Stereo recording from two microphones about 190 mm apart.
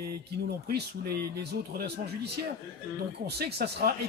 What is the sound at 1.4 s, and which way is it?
Speech, 60° right (ahead or behind).